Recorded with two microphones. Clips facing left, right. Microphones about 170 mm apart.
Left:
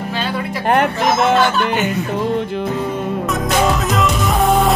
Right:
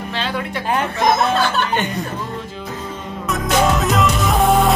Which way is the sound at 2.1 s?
65° left (ahead or behind).